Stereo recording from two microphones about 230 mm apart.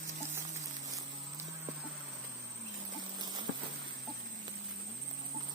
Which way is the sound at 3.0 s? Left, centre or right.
Centre.